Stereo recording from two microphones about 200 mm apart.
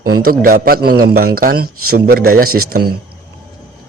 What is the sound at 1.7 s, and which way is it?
Speech, 90° right.